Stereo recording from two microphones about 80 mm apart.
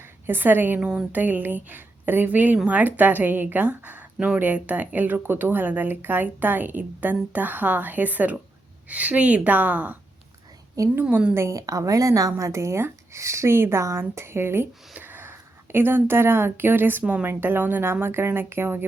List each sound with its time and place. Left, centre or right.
0.3 s speech: right
10.8 s a woman's voice: right
11.1 s a woman's voice: centre
11.3 s speech: right